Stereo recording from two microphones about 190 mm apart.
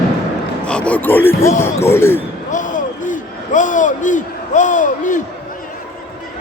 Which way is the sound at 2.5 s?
40° left (ahead or behind).